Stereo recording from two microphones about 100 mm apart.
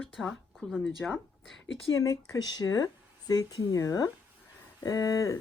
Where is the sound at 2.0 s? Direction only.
35° left (ahead or behind).